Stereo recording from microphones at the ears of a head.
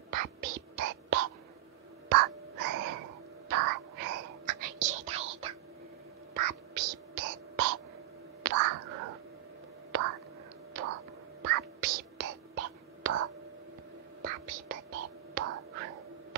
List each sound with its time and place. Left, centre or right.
0.1 s whispering: right
2.0 s a sound: right
6.3 s whispering: right
10.7 s whispering: right